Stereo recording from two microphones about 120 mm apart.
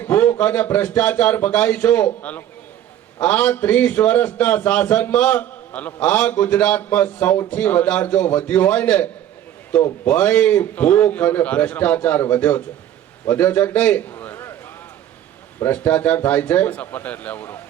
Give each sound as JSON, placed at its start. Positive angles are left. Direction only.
{"t": 0.0, "sound": "a man's voice", "side_deg": 15}
{"t": 10.1, "sound": "a man's voice", "side_deg": 15}
{"t": 15.6, "sound": "a man's voice", "side_deg": 15}